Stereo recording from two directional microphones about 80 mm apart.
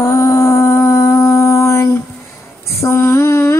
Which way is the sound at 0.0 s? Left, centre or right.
Left.